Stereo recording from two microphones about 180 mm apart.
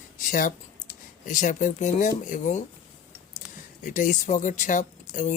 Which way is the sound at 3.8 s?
45° left (ahead or behind).